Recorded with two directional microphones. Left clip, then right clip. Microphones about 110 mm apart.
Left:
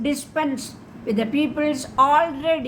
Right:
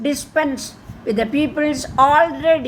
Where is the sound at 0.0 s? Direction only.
45° right (ahead or behind).